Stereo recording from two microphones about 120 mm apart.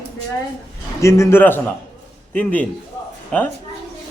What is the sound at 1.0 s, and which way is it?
A man's voice, 25° left (ahead or behind).